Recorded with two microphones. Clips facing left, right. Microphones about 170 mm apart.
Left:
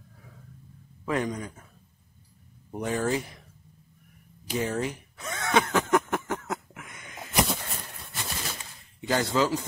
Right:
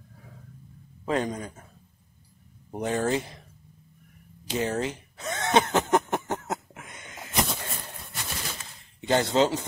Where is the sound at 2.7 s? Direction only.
30° right (ahead or behind).